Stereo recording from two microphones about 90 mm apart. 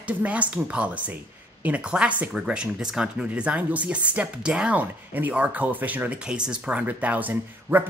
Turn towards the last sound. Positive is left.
turn(degrees=-20)  # may be behind; listen again after turning